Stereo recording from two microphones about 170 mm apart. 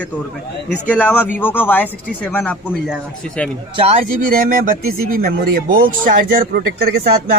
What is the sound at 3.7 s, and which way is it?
Speech, 35° right (ahead or behind).